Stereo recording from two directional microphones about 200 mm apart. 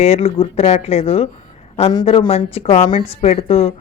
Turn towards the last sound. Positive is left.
turn(degrees=30)  # may be behind; listen again after turning